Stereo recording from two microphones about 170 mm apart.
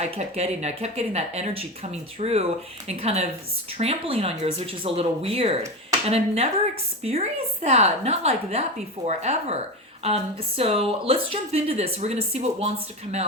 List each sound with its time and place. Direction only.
0.0 s speech: 40° right (ahead or behind)